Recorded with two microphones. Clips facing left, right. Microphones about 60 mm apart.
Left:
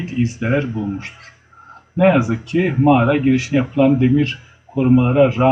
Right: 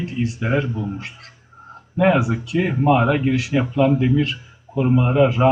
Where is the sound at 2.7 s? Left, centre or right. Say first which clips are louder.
Left 3 dB; left.